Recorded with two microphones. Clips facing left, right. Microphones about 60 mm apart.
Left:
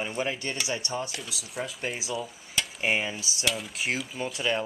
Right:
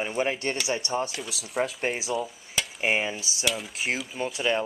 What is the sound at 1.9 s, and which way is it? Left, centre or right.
Speech, centre.